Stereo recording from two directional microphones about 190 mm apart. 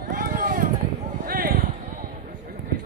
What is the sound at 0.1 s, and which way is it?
Run, 50° right (ahead or behind).